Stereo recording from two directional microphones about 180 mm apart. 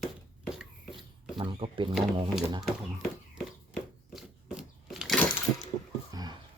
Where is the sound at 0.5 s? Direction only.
Centre (ahead or behind).